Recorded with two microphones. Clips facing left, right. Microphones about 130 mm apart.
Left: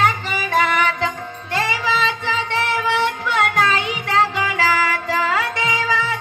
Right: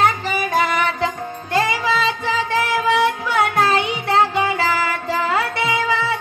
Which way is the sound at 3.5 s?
30° right (ahead or behind).